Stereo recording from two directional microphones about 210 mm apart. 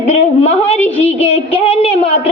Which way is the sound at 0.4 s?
30° left (ahead or behind).